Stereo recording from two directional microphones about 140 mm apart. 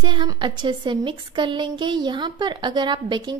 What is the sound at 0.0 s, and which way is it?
A woman's voice, 35° right (ahead or behind).